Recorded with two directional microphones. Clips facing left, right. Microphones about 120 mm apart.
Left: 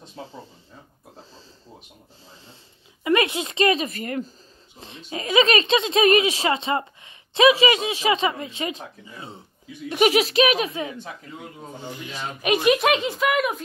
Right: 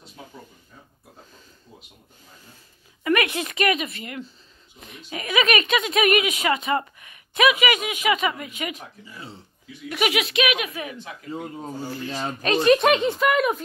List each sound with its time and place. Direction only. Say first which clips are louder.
0.0 s a sound: left 5 dB; 30° left (ahead or behind)
3.0 s speech: left 1 dB; 20° left (ahead or behind); by 4.3 s 40° left (ahead or behind)
4.7 s a woman's voice: left 2 dB; 30° left (ahead or behind)
12.8 s speech: right 2 dB; centre (ahead or behind)